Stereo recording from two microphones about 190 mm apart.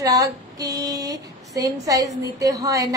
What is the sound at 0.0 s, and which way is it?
Speech, 15° right (ahead or behind).